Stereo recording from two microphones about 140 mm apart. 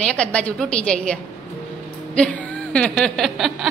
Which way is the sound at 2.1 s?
10° left (ahead or behind).